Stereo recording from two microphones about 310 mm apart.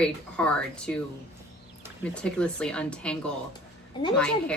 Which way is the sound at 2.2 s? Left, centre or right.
Centre.